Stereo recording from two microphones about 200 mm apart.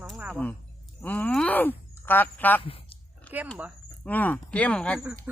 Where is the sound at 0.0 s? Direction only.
5° right (ahead or behind).